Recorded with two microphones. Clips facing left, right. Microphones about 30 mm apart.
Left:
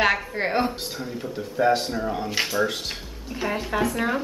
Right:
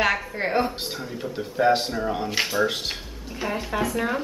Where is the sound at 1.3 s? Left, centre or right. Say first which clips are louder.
Right 1 dB; centre.